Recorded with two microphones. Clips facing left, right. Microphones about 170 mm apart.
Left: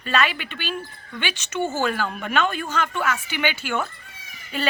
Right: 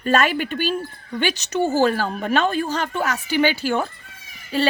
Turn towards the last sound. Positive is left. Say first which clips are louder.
# right 6 dB
turn(degrees=-35)  # may be behind; listen again after turning